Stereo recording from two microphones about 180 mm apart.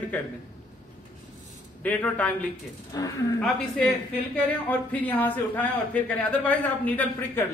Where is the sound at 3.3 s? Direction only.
5° left (ahead or behind).